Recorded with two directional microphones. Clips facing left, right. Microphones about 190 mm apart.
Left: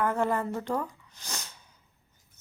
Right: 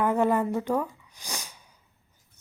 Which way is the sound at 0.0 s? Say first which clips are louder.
Right 4 dB; 15° right (ahead or behind).